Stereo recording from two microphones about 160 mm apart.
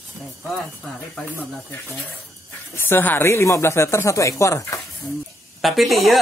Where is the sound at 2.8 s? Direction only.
15° left (ahead or behind).